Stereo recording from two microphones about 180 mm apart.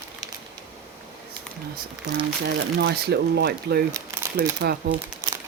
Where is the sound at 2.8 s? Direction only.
65° right (ahead or behind).